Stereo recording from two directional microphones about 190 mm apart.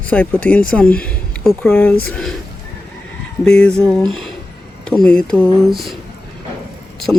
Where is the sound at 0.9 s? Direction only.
5° left (ahead or behind).